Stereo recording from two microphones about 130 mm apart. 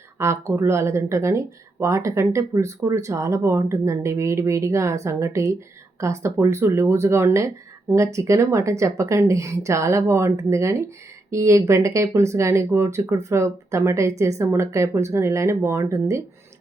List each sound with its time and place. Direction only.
0.2 s speech: 20° right (ahead or behind)